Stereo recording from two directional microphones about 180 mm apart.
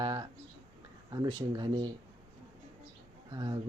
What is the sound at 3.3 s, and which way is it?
Speech, 25° right (ahead or behind).